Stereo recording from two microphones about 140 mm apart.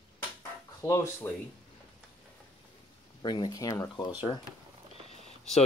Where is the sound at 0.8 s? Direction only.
20° left (ahead or behind).